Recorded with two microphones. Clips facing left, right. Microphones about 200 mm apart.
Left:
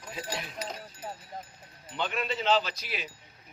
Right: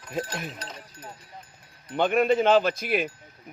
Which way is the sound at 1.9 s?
55° right (ahead or behind).